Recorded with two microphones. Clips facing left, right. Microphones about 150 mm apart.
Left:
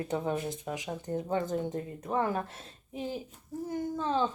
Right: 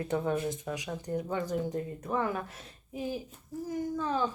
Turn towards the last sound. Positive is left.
turn(degrees=25)  # may be behind; listen again after turning